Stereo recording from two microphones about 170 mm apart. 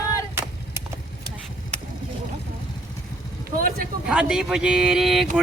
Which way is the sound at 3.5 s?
55° right (ahead or behind).